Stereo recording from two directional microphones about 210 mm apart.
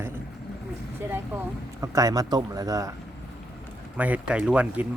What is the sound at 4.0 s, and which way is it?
Speech, 5° right (ahead or behind).